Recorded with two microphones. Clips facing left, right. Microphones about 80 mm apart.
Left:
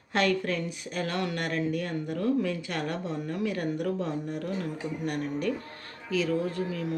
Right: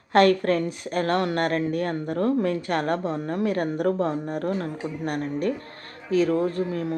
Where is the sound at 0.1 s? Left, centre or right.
Right.